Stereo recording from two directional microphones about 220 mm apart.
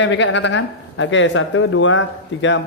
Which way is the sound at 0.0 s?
55° left (ahead or behind).